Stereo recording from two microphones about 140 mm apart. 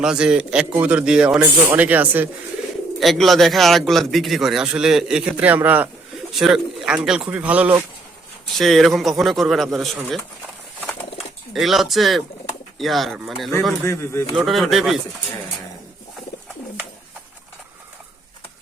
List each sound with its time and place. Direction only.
0.0 s speech: 5° right (ahead or behind)
3.0 s a man's voice: centre (ahead or behind)
8.5 s a man's voice: centre (ahead or behind)
11.5 s a man's voice: centre (ahead or behind)
13.8 s speech: 20° left (ahead or behind)
14.3 s a man's voice: centre (ahead or behind)